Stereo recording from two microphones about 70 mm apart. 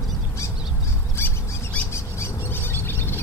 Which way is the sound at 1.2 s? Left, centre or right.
Left.